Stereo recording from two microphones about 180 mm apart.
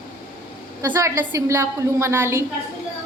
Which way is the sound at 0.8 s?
15° right (ahead or behind).